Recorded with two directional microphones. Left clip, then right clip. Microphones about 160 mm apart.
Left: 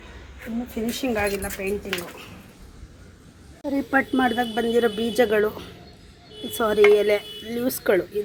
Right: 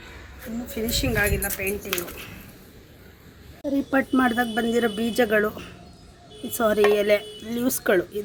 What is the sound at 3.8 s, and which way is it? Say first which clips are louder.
A woman's voice: left 1 dB; 30° right (ahead or behind).